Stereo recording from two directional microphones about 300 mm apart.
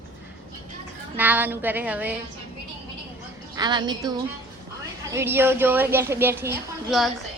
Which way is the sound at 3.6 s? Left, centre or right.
Centre.